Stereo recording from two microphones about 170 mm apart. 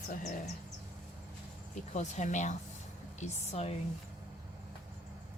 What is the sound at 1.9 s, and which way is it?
Speech, 45° left (ahead or behind).